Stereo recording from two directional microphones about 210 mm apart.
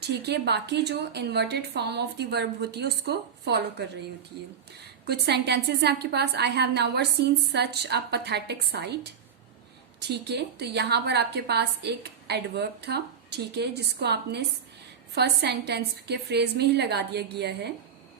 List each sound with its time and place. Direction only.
0.1 s a woman's voice: 55° right (ahead or behind)
10.0 s a woman's voice: 50° right (ahead or behind)